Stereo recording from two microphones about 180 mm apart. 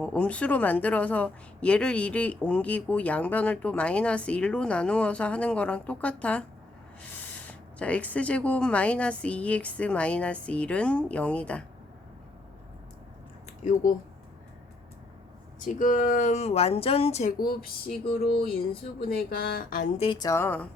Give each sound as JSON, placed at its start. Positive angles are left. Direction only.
{"t": 0.0, "sound": "speech", "side_deg": 5}
{"t": 7.8, "sound": "speech", "side_deg": 5}
{"t": 13.6, "sound": "speech", "side_deg": 45}
{"t": 15.6, "sound": "speech", "side_deg": 45}
{"t": 17.3, "sound": "speech", "side_deg": 55}
{"t": 18.9, "sound": "speech", "side_deg": 60}
{"t": 20.0, "sound": "speech", "side_deg": 25}